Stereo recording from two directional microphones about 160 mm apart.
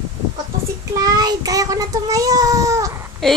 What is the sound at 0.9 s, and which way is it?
A child's voice, 25° right (ahead or behind).